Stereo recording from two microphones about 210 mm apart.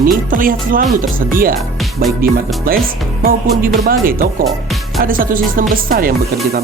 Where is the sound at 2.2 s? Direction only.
45° right (ahead or behind).